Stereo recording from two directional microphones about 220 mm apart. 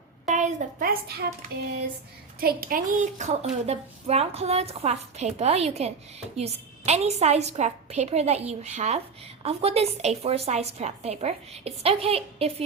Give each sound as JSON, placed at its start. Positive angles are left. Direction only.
{"t": 0.3, "sound": "a woman's voice", "side_deg": -35}